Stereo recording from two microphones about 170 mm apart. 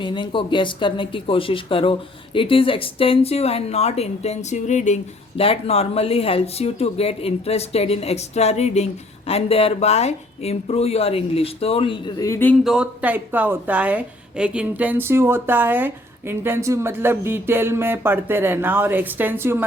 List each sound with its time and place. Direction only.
0.0 s speech: 30° left (ahead or behind)
12.6 s a woman's voice: 5° right (ahead or behind)